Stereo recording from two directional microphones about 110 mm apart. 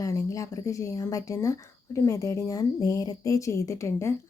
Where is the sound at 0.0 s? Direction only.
30° left (ahead or behind).